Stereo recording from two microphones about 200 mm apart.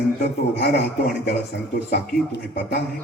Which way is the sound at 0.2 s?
50° left (ahead or behind).